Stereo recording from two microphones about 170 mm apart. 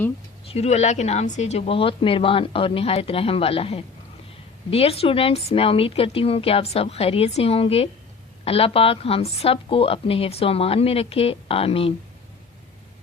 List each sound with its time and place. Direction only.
0.5 s a woman's voice: 40° left (ahead or behind)